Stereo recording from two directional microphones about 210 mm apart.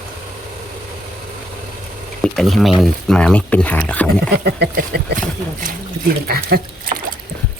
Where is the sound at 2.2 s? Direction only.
Centre (ahead or behind).